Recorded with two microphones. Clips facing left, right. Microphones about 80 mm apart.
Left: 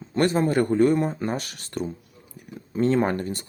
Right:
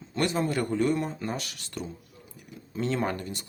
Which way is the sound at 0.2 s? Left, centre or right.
Left.